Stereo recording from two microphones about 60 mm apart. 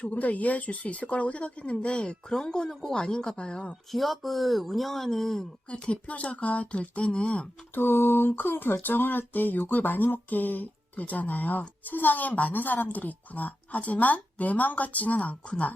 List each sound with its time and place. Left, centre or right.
0.0 s a woman's voice: left
3.9 s speech: centre
5.6 s a woman's voice: centre
7.8 s a woman's voice: left